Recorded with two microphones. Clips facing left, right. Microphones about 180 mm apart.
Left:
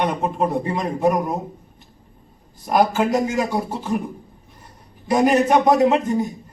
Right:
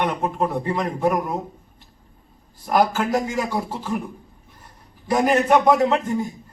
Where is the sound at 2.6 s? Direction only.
20° left (ahead or behind).